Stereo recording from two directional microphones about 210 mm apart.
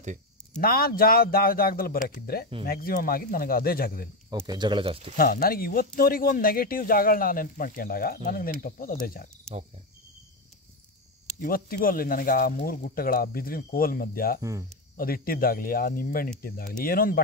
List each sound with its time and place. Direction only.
0.6 s speech: 45° left (ahead or behind)
4.3 s speech: 20° right (ahead or behind)
5.1 s speech: 45° left (ahead or behind)
11.4 s speech: 45° left (ahead or behind)